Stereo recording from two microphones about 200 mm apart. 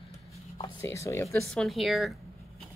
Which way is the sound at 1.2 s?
Centre (ahead or behind).